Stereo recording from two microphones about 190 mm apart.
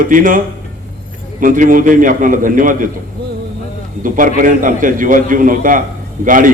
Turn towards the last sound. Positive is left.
turn(degrees=-45)  # may be behind; listen again after turning